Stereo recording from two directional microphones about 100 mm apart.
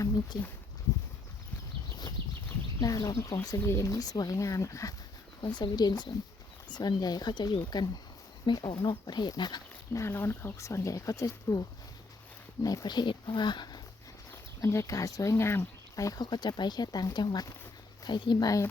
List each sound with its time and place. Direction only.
2.2 s a sound: 55° right (ahead or behind)
2.8 s speech: 40° left (ahead or behind)
3.6 s speech: 25° left (ahead or behind)
5.4 s speech: 50° left (ahead or behind)
9.9 s speech: 25° left (ahead or behind)
12.6 s speech: 40° left (ahead or behind)
14.6 s speech: 30° left (ahead or behind)